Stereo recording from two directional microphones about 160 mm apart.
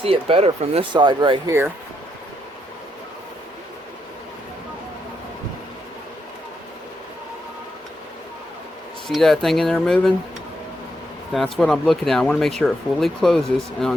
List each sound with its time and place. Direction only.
0.0 s speech: 35° right (ahead or behind)
0.9 s speech: 30° right (ahead or behind)
9.0 s speech: centre (ahead or behind)
11.3 s speech: centre (ahead or behind)